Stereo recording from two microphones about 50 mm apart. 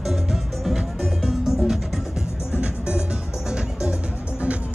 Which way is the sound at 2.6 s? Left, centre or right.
Centre.